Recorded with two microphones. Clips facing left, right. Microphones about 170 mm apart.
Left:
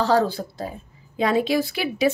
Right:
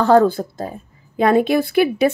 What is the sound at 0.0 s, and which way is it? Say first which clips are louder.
Speech: right 7 dB; 55° right (ahead or behind).